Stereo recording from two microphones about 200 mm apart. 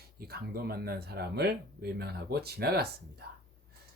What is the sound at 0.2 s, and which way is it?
Speech, 50° right (ahead or behind).